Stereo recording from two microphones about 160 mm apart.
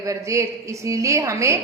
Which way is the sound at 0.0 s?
20° right (ahead or behind).